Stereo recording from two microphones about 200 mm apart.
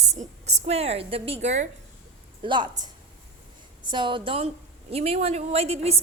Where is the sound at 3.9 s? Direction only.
25° right (ahead or behind).